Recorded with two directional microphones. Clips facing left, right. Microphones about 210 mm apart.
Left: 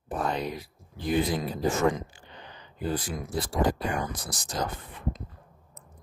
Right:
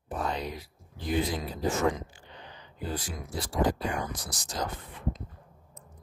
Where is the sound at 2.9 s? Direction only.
55° left (ahead or behind).